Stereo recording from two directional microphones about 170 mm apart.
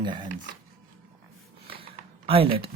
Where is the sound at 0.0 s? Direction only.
25° right (ahead or behind).